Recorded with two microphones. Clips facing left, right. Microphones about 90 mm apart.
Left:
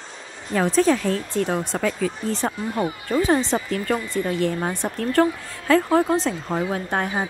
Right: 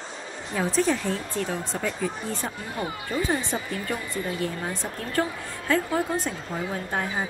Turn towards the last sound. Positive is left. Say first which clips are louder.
# left 4 dB
turn(degrees=60)  # may be behind; listen again after turning